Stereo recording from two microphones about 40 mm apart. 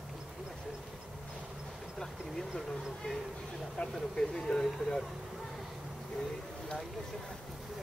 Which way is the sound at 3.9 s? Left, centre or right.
Centre.